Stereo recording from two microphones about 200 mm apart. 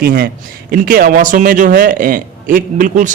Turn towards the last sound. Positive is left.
turn(degrees=-40)  # may be behind; listen again after turning